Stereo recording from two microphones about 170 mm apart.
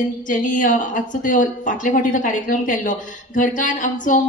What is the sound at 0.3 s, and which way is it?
A woman's voice, 50° left (ahead or behind).